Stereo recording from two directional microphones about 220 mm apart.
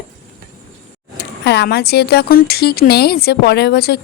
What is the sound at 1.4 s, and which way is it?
Speech, 50° left (ahead or behind).